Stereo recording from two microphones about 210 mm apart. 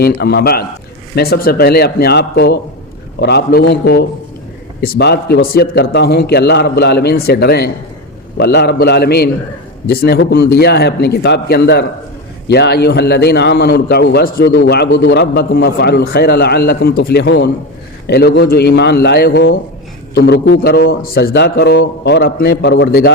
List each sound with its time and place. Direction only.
0.0 s a man's voice: 50° left (ahead or behind)